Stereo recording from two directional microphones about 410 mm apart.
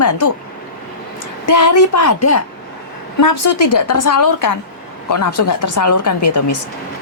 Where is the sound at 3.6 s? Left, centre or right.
Left.